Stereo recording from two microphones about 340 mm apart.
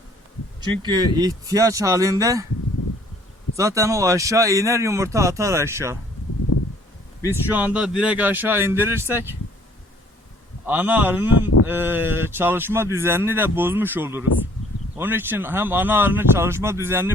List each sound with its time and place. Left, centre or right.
0.8 s speech: centre
3.6 s speech: centre
6.5 s a sound: left
7.3 s speech: centre
10.7 s speech: centre